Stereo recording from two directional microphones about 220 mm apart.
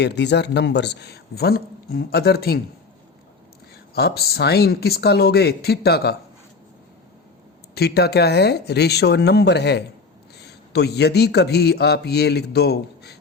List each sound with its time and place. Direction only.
0.0 s a man's voice: 50° left (ahead or behind)
3.9 s a man's voice: 45° left (ahead or behind)
7.8 s a man's voice: 45° left (ahead or behind)